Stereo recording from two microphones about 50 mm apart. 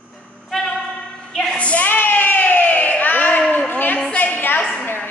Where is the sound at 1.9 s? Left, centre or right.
Left.